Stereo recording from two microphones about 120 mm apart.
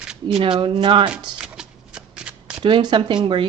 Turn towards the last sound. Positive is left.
turn(degrees=-45)  # may be behind; listen again after turning